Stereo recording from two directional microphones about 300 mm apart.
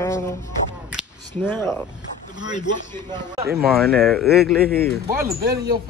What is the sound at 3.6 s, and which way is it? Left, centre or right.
Speech, centre.